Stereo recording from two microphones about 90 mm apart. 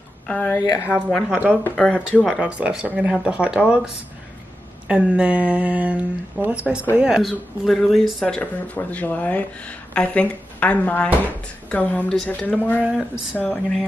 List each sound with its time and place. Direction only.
0.3 s speech: 20° left (ahead or behind)
1.3 s speech: 15° right (ahead or behind)
1.8 s speech: 10° left (ahead or behind)
2.4 s speech: 10° right (ahead or behind); by 13.7 s 15° left (ahead or behind)